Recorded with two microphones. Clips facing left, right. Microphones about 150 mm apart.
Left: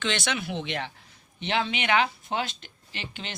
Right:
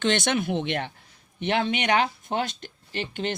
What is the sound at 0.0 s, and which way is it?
Speech, 50° right (ahead or behind).